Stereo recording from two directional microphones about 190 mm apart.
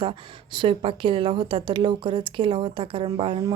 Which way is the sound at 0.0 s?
25° right (ahead or behind).